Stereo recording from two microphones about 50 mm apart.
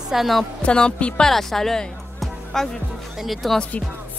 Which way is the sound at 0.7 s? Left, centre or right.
Centre.